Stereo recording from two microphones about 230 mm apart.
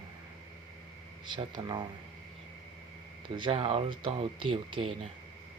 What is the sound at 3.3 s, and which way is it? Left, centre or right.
Speech, right.